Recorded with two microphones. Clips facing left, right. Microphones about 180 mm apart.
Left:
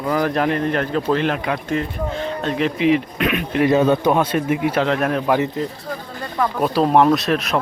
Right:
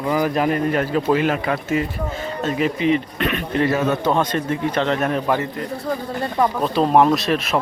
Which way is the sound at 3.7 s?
20° left (ahead or behind).